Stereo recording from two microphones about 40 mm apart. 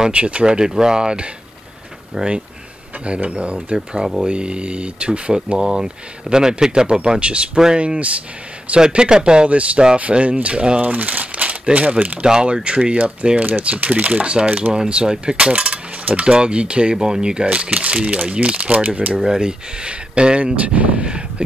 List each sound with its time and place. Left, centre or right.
0.1 s speech: right
7.5 s speech: centre
7.8 s speech: right
10.8 s crumpling: right
11.7 s speech: right
12.2 s speech: right
15.5 s speech: right
19.1 s speech: centre
20.6 s speech: right